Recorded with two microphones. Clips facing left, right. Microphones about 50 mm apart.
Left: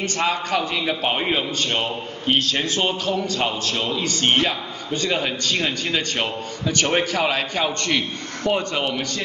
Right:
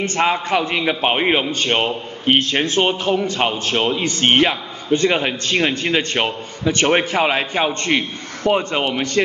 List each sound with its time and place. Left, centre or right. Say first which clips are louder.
0.0 s a man's voice: right 4 dB; right